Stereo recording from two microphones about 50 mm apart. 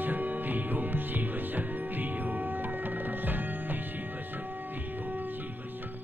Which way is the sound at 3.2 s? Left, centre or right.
Right.